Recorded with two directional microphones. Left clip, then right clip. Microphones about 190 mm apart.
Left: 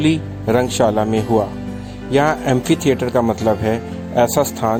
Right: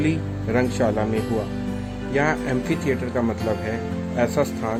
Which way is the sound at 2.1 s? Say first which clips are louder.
Left 7 dB; 40° left (ahead or behind).